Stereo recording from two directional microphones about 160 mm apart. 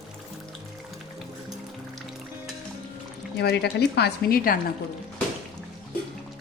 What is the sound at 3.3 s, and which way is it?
A woman's voice, 90° left.